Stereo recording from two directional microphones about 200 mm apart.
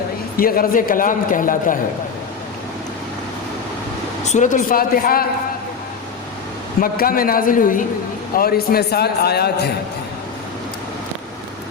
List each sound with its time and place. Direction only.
0.3 s a man's voice: 45° left (ahead or behind)
4.2 s a man's voice: 35° left (ahead or behind)
6.8 s a man's voice: 45° left (ahead or behind)